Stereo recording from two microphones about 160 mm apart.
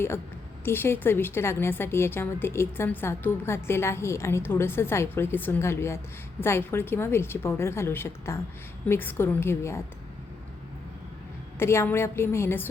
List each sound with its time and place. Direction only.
0.6 s a woman's voice: 15° left (ahead or behind)
11.6 s a woman's voice: 15° left (ahead or behind)